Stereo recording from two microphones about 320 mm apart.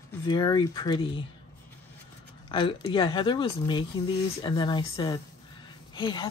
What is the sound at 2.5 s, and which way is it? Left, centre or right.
Speech, centre.